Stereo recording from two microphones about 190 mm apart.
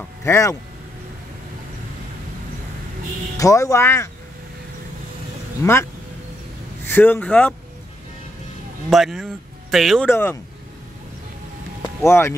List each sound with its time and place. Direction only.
0.2 s speech: 15° left (ahead or behind)
3.3 s speech: 15° left (ahead or behind)
5.6 s speech: 15° left (ahead or behind)
6.9 s speech: 10° left (ahead or behind)
8.9 s speech: centre (ahead or behind)
10.0 s speech: 10° left (ahead or behind)
12.0 s speech: 15° left (ahead or behind)